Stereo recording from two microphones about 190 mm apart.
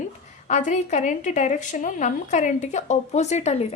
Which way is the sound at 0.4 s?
40° left (ahead or behind).